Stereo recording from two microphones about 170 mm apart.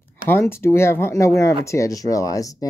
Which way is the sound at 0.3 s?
15° left (ahead or behind).